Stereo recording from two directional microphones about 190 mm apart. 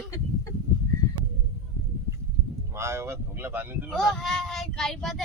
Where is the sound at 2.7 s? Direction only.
15° right (ahead or behind).